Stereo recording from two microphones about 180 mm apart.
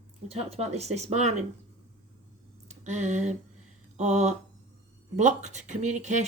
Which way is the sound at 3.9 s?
40° right (ahead or behind).